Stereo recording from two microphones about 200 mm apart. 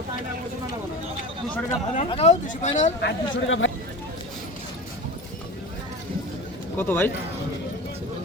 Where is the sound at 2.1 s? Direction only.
30° left (ahead or behind).